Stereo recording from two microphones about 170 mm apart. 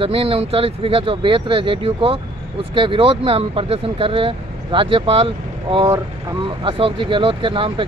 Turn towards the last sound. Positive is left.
turn(degrees=-30)  # may be behind; listen again after turning